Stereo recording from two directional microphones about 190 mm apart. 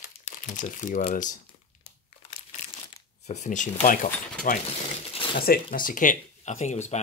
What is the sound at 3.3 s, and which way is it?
Speech, 40° left (ahead or behind).